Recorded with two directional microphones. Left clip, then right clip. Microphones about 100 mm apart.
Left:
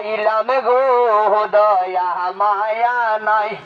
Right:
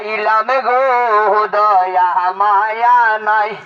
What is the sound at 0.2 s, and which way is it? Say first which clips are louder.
Speech: right 3 dB; centre (ahead or behind).